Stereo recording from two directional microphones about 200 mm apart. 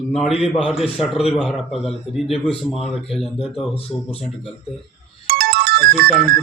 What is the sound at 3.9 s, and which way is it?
Speech, 5° left (ahead or behind).